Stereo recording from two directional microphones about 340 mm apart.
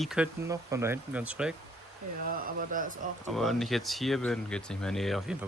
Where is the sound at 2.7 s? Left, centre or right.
Right.